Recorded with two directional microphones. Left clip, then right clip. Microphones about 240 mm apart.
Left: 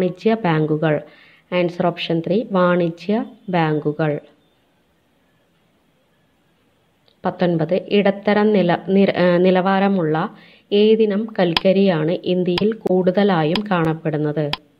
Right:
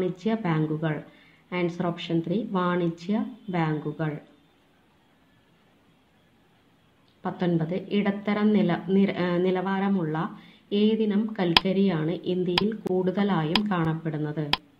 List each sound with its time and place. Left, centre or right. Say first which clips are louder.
0.0 s a woman's voice: left 10 dB; left
7.2 s a woman's voice: left 9 dB; left